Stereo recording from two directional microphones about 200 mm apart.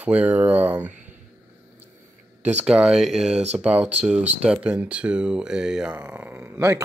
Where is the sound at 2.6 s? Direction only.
5° right (ahead or behind).